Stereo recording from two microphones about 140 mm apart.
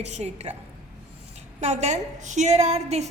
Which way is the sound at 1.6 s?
55° right (ahead or behind).